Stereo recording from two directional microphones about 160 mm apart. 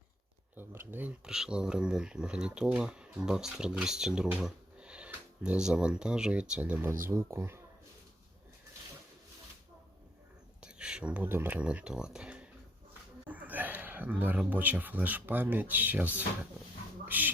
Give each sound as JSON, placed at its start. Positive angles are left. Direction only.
{"t": 0.5, "sound": "speech", "side_deg": -15}
{"t": 10.6, "sound": "speech", "side_deg": -5}
{"t": 17.1, "sound": "speech", "side_deg": -10}